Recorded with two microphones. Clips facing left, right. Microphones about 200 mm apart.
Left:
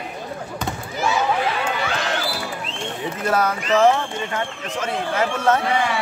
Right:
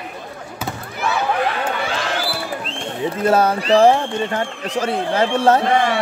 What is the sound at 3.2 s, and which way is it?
A man's voice, 30° right (ahead or behind).